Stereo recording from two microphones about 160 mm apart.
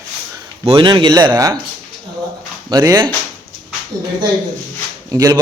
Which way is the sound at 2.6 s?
25° right (ahead or behind).